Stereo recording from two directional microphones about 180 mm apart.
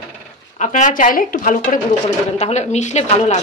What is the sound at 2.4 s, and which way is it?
A woman's voice, 40° left (ahead or behind).